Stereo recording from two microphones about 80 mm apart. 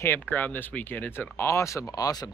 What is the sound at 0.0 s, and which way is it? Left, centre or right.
Speech, left.